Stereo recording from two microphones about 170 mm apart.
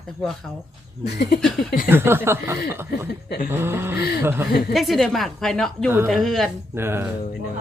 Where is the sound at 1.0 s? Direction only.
75° left (ahead or behind).